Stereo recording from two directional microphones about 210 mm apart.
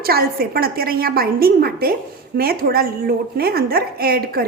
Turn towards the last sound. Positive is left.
turn(degrees=-45)  # may be behind; listen again after turning